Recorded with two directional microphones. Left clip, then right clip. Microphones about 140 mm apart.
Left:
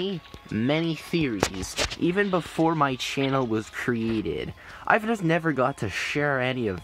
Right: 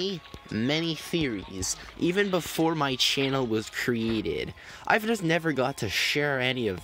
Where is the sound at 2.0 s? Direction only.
35° right (ahead or behind).